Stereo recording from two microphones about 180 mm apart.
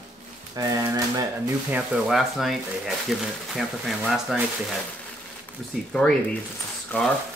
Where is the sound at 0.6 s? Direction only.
20° right (ahead or behind).